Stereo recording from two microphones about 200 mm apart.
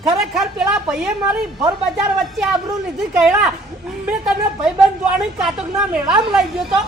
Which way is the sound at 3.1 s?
5° right (ahead or behind).